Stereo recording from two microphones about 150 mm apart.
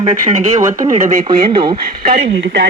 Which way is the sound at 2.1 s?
90° right.